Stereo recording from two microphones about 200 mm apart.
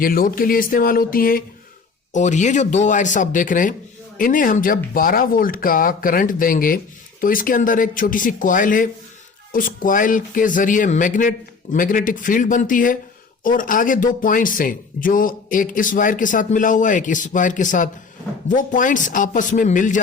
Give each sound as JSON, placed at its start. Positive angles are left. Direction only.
{"t": 0.0, "sound": "speech", "side_deg": 45}